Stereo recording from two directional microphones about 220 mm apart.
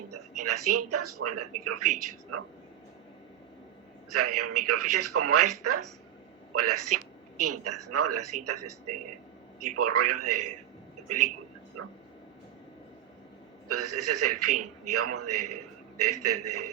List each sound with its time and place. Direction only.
0.1 s a man's voice: 90° right
4.1 s a man's voice: 90° right
11.8 s speech: 90° right
13.7 s a man's voice: 90° right